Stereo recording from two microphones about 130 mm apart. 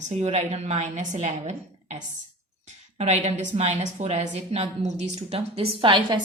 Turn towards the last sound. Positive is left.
turn(degrees=-40)  # may be behind; listen again after turning